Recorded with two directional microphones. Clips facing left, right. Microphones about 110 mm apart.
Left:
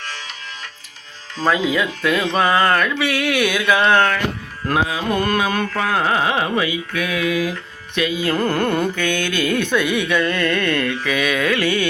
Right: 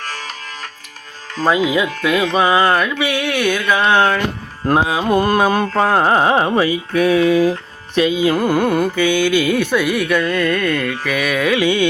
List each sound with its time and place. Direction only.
0.0 s music: 45° right (ahead or behind)
1.5 s carnatic music: 15° right (ahead or behind); by 3.8 s 5° left (ahead or behind)
3.8 s carnatic music: 10° right (ahead or behind)
4.6 s carnatic music: 35° right (ahead or behind)
8.2 s carnatic music: 10° right (ahead or behind)